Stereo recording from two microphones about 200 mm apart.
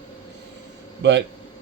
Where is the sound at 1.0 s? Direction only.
55° right (ahead or behind).